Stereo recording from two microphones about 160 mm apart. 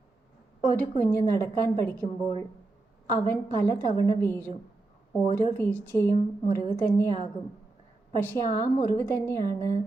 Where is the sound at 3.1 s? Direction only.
20° left (ahead or behind).